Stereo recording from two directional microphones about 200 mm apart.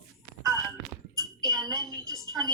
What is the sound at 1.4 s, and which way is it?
Speech, 20° right (ahead or behind).